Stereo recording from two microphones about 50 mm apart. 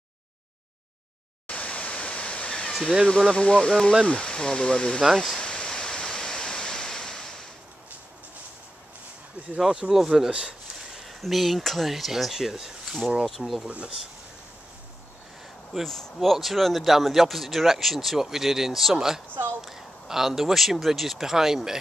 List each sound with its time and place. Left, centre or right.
1.5 s waterfall: left
3.1 s speech: centre
5.1 s a man's voice: centre
5.4 s pink noise: centre
9.8 s speech: centre
13.7 s speech: right
15.8 s a man's voice: centre